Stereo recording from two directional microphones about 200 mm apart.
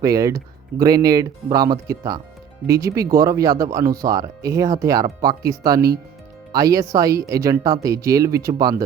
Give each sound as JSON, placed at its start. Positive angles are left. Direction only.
{"t": 0.0, "sound": "speech", "side_deg": -15}